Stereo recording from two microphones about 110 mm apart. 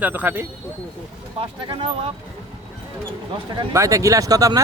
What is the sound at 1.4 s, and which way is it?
Speech, 50° right (ahead or behind).